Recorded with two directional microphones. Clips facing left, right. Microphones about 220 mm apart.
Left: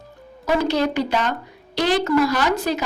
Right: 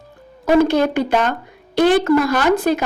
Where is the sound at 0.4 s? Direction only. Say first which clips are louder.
Right 6 dB; 50° right (ahead or behind).